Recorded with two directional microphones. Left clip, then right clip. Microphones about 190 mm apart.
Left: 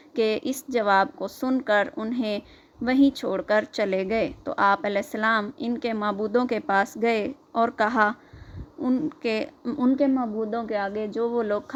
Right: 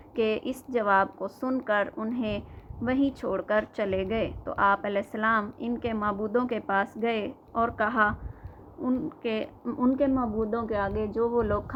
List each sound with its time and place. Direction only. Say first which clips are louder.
0.1 s speech: left 3 dB; 45° left (ahead or behind)
9.6 s speech: left 2 dB; 35° left (ahead or behind)